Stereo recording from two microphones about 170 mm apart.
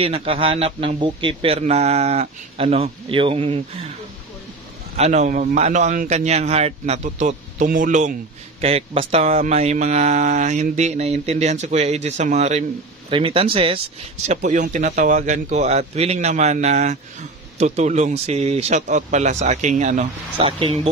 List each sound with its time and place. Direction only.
0.0 s a man's voice: 35° right (ahead or behind)
4.9 s a man's voice: 40° right (ahead or behind)
14.2 s a man's voice: 45° right (ahead or behind)